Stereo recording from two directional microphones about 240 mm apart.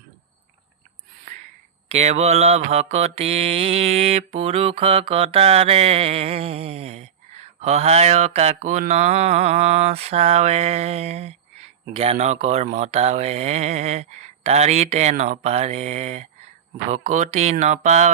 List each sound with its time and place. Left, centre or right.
1.9 s mantra: right